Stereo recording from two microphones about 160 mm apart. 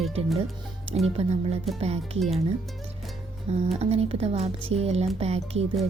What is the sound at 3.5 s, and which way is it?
Speech, 40° right (ahead or behind).